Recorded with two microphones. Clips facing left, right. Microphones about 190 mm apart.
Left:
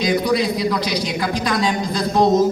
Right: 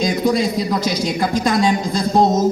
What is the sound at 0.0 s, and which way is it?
A man's voice, 45° right (ahead or behind).